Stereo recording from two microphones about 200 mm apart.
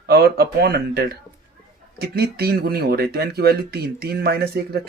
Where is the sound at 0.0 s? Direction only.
50° right (ahead or behind).